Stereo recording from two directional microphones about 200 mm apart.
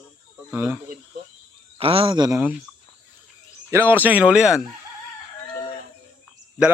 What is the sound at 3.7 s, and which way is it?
Speech, 10° right (ahead or behind).